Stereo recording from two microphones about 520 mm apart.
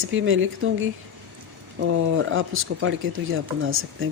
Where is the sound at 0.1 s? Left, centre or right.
Right.